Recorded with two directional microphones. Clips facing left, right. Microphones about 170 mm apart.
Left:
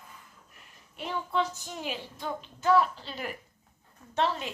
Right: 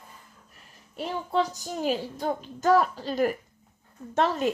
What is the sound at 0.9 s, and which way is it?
A child's voice, 35° right (ahead or behind).